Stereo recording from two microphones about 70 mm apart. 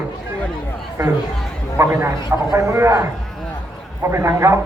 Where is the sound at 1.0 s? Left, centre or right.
Right.